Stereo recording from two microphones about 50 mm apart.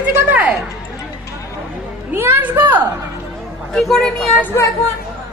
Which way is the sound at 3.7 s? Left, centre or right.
Centre.